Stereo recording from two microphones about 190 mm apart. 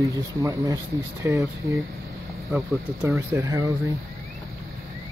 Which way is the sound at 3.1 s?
15° right (ahead or behind).